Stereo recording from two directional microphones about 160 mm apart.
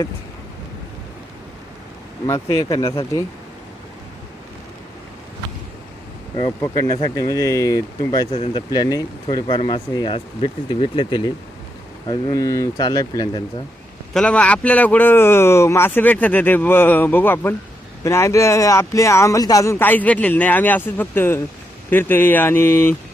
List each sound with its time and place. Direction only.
2.2 s speech: 20° left (ahead or behind)
6.6 s speech: 20° left (ahead or behind)
14.1 s speech: 5° left (ahead or behind)